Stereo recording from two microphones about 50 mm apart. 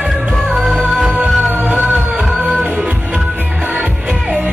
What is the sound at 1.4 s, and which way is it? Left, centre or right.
Music, right.